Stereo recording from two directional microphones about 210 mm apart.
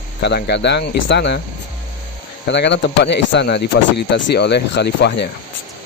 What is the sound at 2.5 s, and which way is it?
Speech, 55° left (ahead or behind).